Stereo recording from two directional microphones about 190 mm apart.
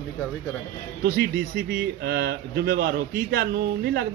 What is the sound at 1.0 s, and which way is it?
A man's voice, 55° right (ahead or behind).